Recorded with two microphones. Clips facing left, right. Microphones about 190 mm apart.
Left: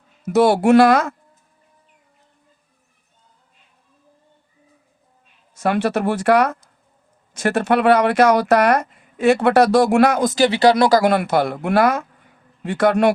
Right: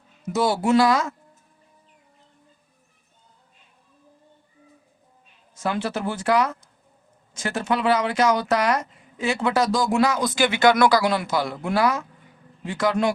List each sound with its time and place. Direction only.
0.3 s speech: 65° left (ahead or behind)
5.5 s speech: 65° left (ahead or behind); by 11.0 s 35° left (ahead or behind)
11.0 s speech: 60° left (ahead or behind)